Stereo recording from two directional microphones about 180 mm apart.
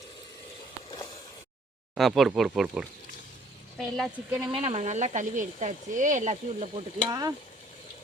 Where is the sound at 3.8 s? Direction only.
Centre (ahead or behind).